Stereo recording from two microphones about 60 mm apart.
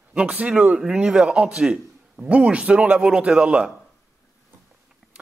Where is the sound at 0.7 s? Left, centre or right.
Centre.